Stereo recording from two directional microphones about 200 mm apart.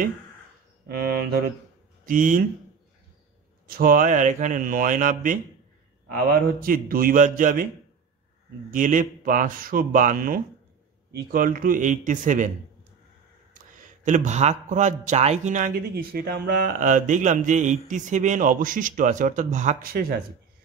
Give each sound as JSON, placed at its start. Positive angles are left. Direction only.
{"t": 0.8, "sound": "speech", "side_deg": -50}
{"t": 3.6, "sound": "speech", "side_deg": -45}
{"t": 8.7, "sound": "speech", "side_deg": -40}
{"t": 13.5, "sound": "speech", "side_deg": -40}